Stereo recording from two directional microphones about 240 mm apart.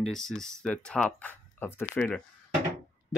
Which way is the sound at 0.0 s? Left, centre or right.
Centre.